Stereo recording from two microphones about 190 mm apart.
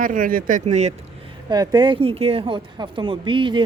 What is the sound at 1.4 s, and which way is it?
Speech, 20° right (ahead or behind).